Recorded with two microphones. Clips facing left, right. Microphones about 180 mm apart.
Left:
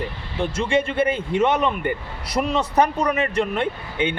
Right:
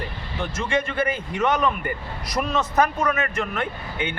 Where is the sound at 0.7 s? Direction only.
30° left (ahead or behind).